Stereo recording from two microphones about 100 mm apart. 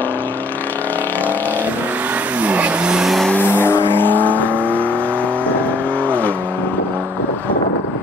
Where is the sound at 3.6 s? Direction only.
25° left (ahead or behind).